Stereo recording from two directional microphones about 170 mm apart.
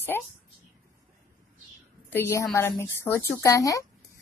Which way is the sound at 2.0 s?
15° left (ahead or behind).